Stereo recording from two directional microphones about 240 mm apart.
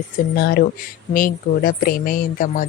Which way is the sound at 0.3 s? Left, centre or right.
Left.